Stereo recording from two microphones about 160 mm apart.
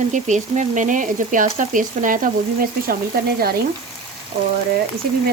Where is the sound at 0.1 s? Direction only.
50° right (ahead or behind).